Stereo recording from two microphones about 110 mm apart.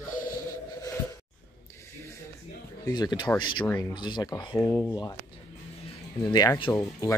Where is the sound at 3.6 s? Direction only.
25° left (ahead or behind).